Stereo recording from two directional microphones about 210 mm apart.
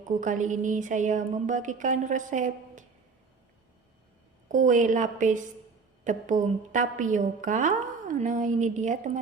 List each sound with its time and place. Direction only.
0.0 s a woman's voice: 35° right (ahead or behind)
4.4 s a woman's voice: 35° right (ahead or behind)